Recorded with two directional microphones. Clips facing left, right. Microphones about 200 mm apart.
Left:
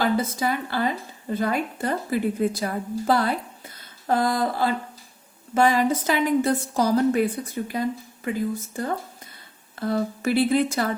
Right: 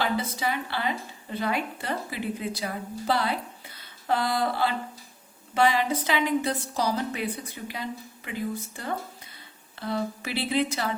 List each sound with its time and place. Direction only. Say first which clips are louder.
0.0 s a woman's voice: left 5 dB; 45° left (ahead or behind)